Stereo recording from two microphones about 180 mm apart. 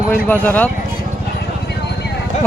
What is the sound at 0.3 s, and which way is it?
Speech, 10° left (ahead or behind).